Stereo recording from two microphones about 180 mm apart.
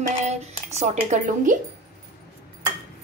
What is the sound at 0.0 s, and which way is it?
Speech, 40° right (ahead or behind).